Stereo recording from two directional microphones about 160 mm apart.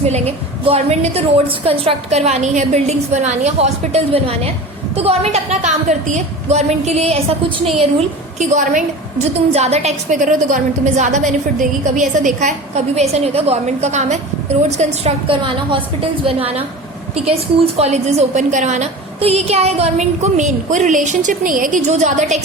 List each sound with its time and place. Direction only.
0.0 s a woman's voice: 40° right (ahead or behind)
15.4 s a woman's voice: 35° right (ahead or behind)